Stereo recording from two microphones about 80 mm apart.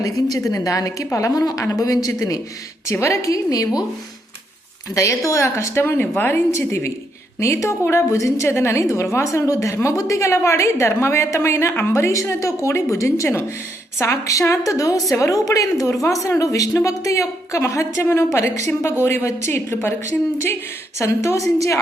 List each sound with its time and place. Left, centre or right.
0.0 s a woman's voice: left
2.9 s a woman's voice: left
4.9 s a woman's voice: left
5.8 s a woman's voice: left